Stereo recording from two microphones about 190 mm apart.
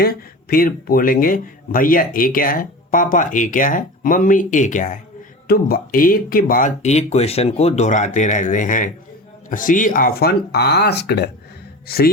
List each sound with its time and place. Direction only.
0.0 s speech: 55° left (ahead or behind)